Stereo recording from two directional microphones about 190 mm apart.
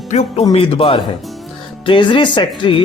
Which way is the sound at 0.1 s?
35° left (ahead or behind).